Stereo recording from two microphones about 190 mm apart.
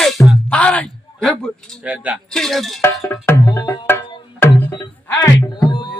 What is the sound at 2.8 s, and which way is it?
Music, 10° left (ahead or behind).